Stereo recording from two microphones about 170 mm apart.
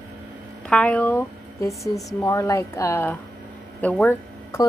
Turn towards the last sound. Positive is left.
turn(degrees=10)  # may be behind; listen again after turning